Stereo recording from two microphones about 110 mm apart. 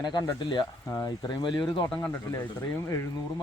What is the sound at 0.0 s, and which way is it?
Speech, 40° left (ahead or behind).